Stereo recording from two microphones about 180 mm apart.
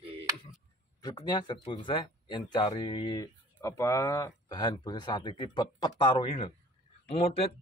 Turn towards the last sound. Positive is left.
turn(degrees=35)  # may be behind; listen again after turning